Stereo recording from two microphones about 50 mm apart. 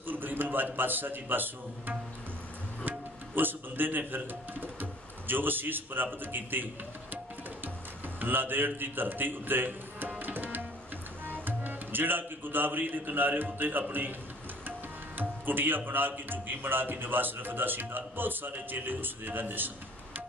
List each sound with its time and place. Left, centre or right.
0.0 s a man's voice: right
2.8 s music: right
4.1 s speech: right
8.2 s a man's voice: right
15.1 s speech: right